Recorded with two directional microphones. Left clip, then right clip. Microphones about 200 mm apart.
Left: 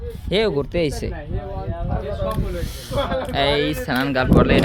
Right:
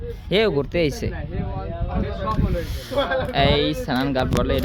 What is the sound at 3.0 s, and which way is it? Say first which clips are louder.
Speech: right 1 dB; 45° right (ahead or behind).